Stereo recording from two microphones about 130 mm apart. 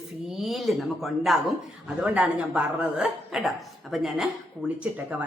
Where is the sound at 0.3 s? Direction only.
Centre (ahead or behind).